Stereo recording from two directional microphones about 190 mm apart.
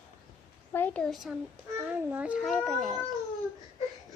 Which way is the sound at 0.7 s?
10° left (ahead or behind).